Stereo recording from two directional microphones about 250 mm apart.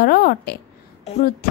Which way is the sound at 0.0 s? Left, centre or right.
Left.